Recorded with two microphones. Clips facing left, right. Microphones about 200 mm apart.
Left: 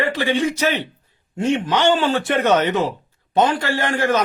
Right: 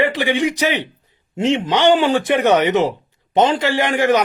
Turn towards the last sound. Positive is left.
turn(degrees=-15)  # may be behind; listen again after turning